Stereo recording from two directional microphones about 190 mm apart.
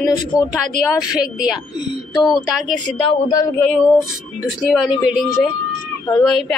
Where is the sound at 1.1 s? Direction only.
5° right (ahead or behind).